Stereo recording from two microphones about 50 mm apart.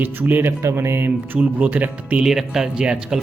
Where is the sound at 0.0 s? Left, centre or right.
Right.